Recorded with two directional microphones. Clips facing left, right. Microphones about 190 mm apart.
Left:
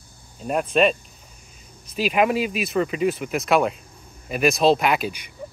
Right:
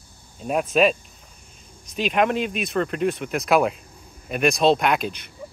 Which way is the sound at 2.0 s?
5° left (ahead or behind).